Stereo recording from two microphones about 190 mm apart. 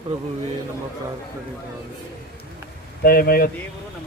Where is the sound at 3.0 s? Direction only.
55° left (ahead or behind).